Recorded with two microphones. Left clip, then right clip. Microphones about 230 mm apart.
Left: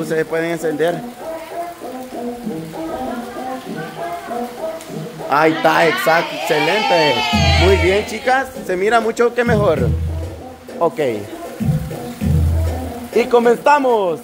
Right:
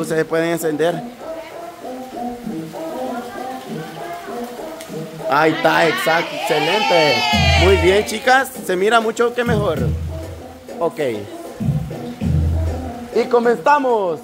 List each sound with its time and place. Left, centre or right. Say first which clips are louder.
0.0 s speech: even; centre
5.3 s speech: left 1 dB; centre
7.2 s speech: even; right
7.6 s speech: even; centre
10.8 s a man's voice: left 3 dB; centre
13.1 s a man's voice: left 2 dB; centre